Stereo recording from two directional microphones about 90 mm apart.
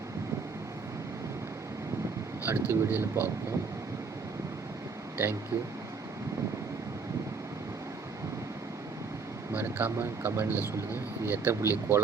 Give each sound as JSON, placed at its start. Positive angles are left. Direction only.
{"t": 2.4, "sound": "speech", "side_deg": -25}
{"t": 5.1, "sound": "speech", "side_deg": -25}
{"t": 9.5, "sound": "speech", "side_deg": -25}